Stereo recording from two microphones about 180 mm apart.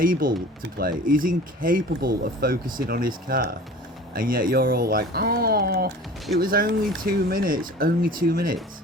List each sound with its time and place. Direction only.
0.0 s speech: 50° right (ahead or behind)